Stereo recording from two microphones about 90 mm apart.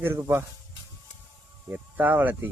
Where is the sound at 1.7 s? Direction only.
20° right (ahead or behind).